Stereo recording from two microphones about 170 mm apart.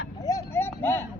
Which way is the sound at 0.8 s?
15° left (ahead or behind).